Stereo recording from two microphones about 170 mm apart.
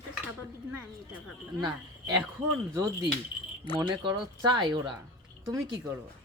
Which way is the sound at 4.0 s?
25° right (ahead or behind).